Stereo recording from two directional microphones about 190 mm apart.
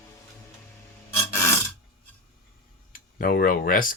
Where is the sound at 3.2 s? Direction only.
50° left (ahead or behind).